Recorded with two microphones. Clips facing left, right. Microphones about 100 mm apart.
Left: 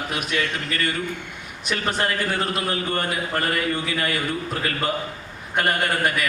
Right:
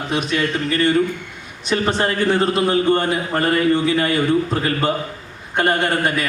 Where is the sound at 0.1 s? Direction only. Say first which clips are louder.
Right 8 dB; 30° right (ahead or behind).